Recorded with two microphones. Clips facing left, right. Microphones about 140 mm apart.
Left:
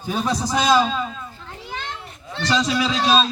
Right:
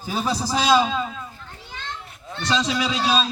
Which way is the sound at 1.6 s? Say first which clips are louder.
Left 5 dB; 90° left.